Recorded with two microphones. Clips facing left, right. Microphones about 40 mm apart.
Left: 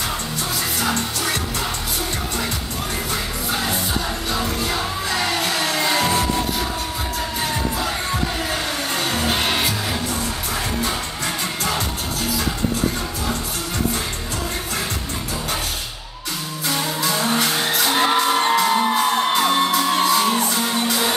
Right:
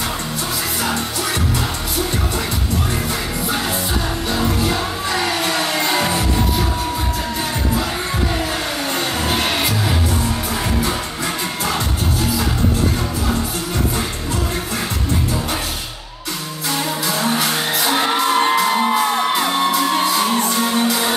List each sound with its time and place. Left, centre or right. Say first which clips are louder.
0.7 s music: right 1 dB; centre
4.6 s music: right 3 dB; centre
8.9 s music: right 1 dB; centre
16.6 s music: right 1 dB; centre